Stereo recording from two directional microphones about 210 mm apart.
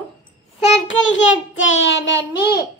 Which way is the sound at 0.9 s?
60° left (ahead or behind).